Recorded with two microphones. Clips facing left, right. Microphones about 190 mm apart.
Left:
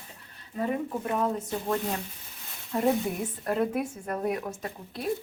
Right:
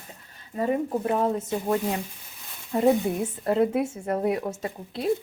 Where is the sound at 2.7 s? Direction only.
25° right (ahead or behind).